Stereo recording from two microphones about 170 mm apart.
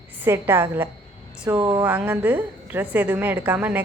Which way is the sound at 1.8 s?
10° right (ahead or behind).